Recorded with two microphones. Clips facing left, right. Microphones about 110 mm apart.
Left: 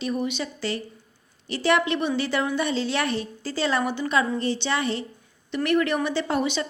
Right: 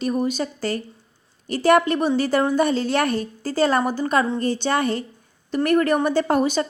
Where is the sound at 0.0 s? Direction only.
40° right (ahead or behind).